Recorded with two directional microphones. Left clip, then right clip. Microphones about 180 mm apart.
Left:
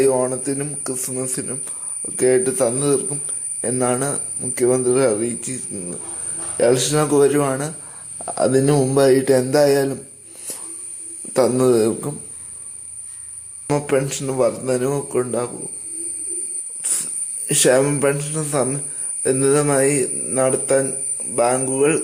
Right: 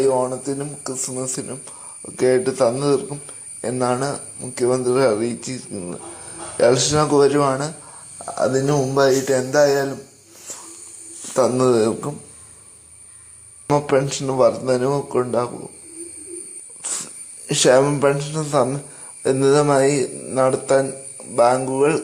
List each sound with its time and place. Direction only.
0.0 s a man's voice: 20° left (ahead or behind)
8.3 s speech: 30° left (ahead or behind)
11.3 s speech: 15° left (ahead or behind)
13.7 s a man's voice: 5° left (ahead or behind)
16.8 s speech: centre (ahead or behind)